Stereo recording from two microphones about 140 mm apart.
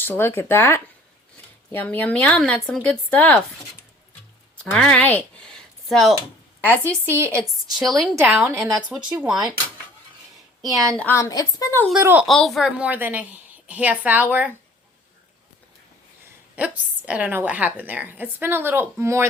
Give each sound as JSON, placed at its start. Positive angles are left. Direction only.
{"t": 0.0, "sound": "a woman's voice", "side_deg": 15}
{"t": 4.6, "sound": "speech", "side_deg": 5}
{"t": 6.7, "sound": "a woman's voice", "side_deg": 15}
{"t": 7.8, "sound": "a woman's voice", "side_deg": 0}
{"t": 8.1, "sound": "a woman's voice", "side_deg": -15}
{"t": 9.0, "sound": "a woman's voice", "side_deg": -5}
{"t": 10.9, "sound": "a woman's voice", "side_deg": 10}
{"t": 11.2, "sound": "a woman's voice", "side_deg": 25}
{"t": 11.9, "sound": "a woman's voice", "side_deg": -15}
{"t": 12.3, "sound": "a woman's voice", "side_deg": 0}
{"t": 16.6, "sound": "a woman's voice", "side_deg": -10}